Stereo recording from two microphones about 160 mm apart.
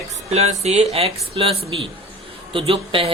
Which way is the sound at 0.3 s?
40° right (ahead or behind).